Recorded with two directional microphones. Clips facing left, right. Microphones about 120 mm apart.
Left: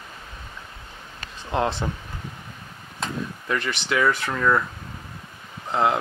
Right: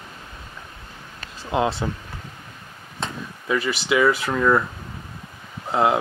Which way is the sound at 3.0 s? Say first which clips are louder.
Left 2 dB; 5° right (ahead or behind).